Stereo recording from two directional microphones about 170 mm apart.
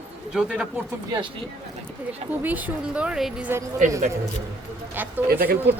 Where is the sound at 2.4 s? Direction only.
10° right (ahead or behind).